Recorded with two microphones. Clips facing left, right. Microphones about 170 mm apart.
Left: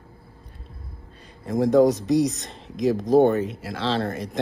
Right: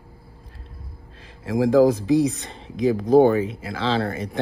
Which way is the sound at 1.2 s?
Centre (ahead or behind).